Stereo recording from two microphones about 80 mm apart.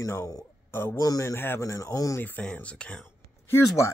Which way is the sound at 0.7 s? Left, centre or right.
Left.